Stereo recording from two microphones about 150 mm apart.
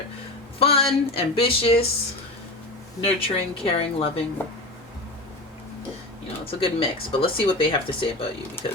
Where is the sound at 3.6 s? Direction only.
40° left (ahead or behind).